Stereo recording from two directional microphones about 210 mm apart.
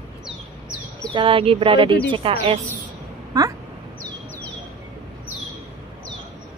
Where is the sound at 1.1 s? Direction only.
25° right (ahead or behind).